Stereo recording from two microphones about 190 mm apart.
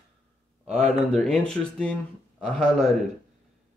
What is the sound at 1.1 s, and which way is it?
Speech, 5° left (ahead or behind).